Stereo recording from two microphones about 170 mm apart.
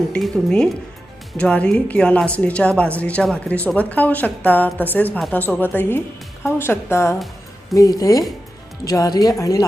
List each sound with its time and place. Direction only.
0.1 s a woman's voice: 5° left (ahead or behind); by 9.6 s 20° left (ahead or behind)